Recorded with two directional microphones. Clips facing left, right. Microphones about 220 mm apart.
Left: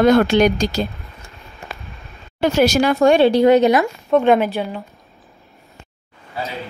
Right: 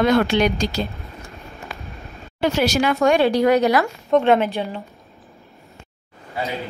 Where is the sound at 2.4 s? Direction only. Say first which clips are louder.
Left 4 dB; 45° left (ahead or behind); by 3.9 s 25° left (ahead or behind).